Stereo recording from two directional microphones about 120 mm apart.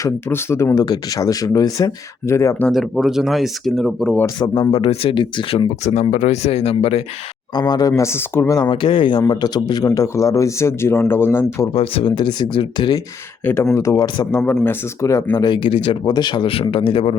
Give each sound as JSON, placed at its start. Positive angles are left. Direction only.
{"t": 0.0, "sound": "speech", "side_deg": 20}
{"t": 2.7, "sound": "speech", "side_deg": 0}
{"t": 4.4, "sound": "speech", "side_deg": 40}
{"t": 4.7, "sound": "speech", "side_deg": 50}
{"t": 5.8, "sound": "speech", "side_deg": 70}
{"t": 7.5, "sound": "speech", "side_deg": 35}
{"t": 8.7, "sound": "speech", "side_deg": 45}
{"t": 11.7, "sound": "speech", "side_deg": 50}
{"t": 13.4, "sound": "speech", "side_deg": 20}
{"t": 13.7, "sound": "speech", "side_deg": 30}
{"t": 14.6, "sound": "speech", "side_deg": 20}
{"t": 15.4, "sound": "speech", "side_deg": 40}